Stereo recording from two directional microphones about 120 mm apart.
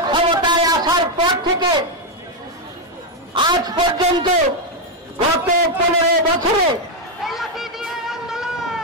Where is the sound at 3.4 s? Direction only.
35° right (ahead or behind).